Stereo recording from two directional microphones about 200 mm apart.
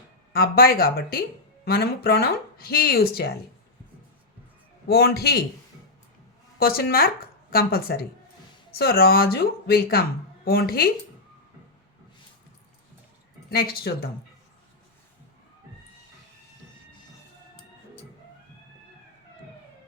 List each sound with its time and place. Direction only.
0.3 s speech: 50° left (ahead or behind)
4.9 s speech: 55° left (ahead or behind)
6.6 s speech: 50° left (ahead or behind)
13.5 s speech: 50° left (ahead or behind)